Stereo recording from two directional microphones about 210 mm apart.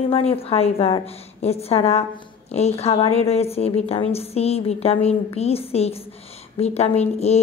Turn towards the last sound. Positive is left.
turn(degrees=30)  # may be behind; listen again after turning